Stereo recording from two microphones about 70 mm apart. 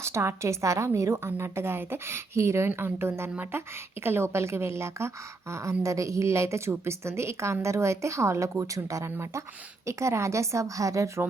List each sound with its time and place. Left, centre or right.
0.0 s a woman's voice: right